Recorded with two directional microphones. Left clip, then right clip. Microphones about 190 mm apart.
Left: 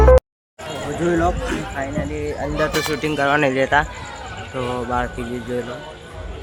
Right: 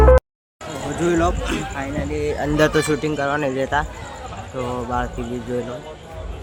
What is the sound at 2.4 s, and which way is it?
Speech, 50° right (ahead or behind).